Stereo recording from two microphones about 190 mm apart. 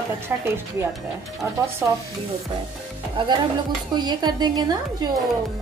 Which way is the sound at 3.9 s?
25° right (ahead or behind).